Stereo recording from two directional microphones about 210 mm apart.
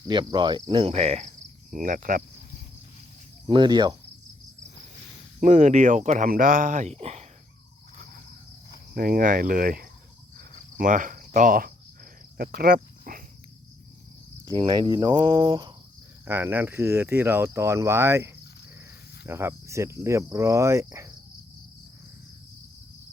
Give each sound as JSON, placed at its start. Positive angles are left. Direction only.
{"t": 0.1, "sound": "speech", "side_deg": -20}
{"t": 3.4, "sound": "speech", "side_deg": -20}
{"t": 5.4, "sound": "speech", "side_deg": -35}
{"t": 9.0, "sound": "speech", "side_deg": -40}
{"t": 10.8, "sound": "cricket", "side_deg": -40}
{"t": 12.4, "sound": "speech", "side_deg": -45}
{"t": 14.4, "sound": "speech", "side_deg": -20}
{"t": 16.2, "sound": "speech", "side_deg": -10}